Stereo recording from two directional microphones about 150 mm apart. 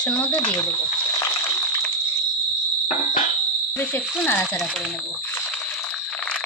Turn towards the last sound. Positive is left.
turn(degrees=15)  # may be behind; listen again after turning